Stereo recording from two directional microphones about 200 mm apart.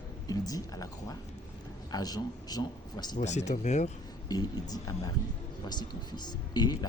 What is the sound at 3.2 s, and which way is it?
Speech, 35° left (ahead or behind).